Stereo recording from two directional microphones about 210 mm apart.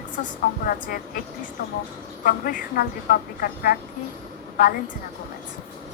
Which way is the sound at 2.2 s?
45° left (ahead or behind).